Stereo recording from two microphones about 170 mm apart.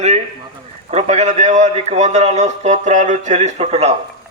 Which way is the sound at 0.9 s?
40° right (ahead or behind).